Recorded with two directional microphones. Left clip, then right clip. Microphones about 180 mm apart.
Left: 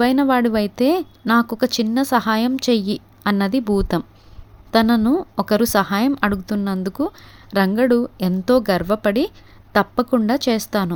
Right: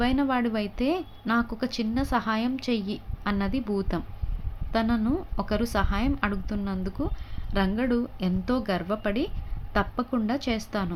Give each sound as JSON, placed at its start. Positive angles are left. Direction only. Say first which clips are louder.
{"t": 0.0, "sound": "a woman's voice", "louder": "left 9 dB", "side_deg": 55}